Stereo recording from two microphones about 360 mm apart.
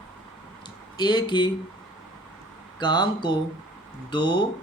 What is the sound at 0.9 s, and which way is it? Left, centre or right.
Speech, centre.